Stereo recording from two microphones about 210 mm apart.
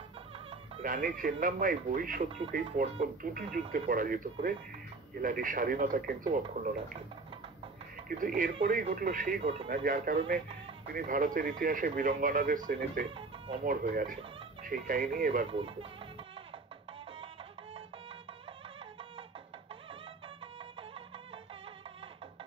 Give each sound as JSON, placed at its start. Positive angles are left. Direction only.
{"t": 0.8, "sound": "speech", "side_deg": -40}
{"t": 8.1, "sound": "speech", "side_deg": -40}
{"t": 9.8, "sound": "speech", "side_deg": -40}
{"t": 15.5, "sound": "speech", "side_deg": -25}